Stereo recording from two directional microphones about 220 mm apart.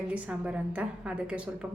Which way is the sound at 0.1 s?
5° right (ahead or behind).